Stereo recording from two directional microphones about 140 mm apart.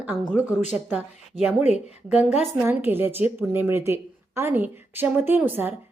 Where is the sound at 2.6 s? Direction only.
15° right (ahead or behind).